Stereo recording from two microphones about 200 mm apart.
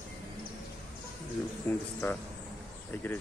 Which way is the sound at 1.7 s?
10° left (ahead or behind).